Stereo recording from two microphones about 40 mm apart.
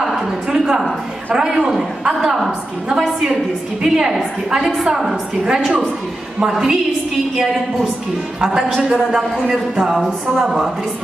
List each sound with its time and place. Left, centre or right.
0.0 s a sound: centre
1.3 s a woman's voice: centre
3.8 s a woman's voice: centre
8.5 s a woman's voice: centre
8.8 s a woman's voice: right